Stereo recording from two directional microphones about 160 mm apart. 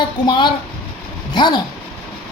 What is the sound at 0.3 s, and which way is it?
Speech, 30° left (ahead or behind).